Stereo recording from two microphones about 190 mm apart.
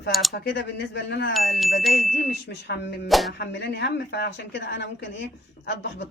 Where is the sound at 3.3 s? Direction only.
65° left (ahead or behind).